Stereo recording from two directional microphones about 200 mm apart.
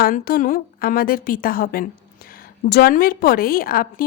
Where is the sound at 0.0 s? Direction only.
45° left (ahead or behind).